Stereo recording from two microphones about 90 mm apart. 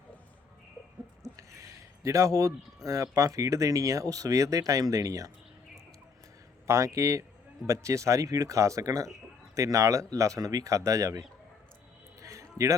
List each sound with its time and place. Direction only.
1.4 s speech: 35° right (ahead or behind)
6.7 s speech: 35° right (ahead or behind)
12.2 s a sound: 35° right (ahead or behind)